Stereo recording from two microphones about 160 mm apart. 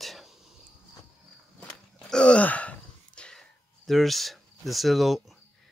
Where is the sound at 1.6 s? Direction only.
5° left (ahead or behind).